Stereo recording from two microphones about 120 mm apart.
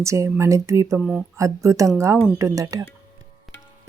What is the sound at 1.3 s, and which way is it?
Speech, 25° right (ahead or behind).